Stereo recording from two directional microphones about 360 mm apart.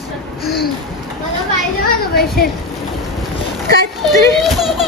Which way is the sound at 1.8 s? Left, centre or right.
Left.